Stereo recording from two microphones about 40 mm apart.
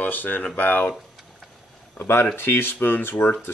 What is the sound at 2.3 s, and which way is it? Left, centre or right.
Speech, left.